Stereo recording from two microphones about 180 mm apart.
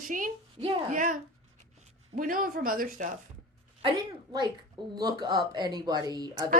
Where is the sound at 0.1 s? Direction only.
45° right (ahead or behind).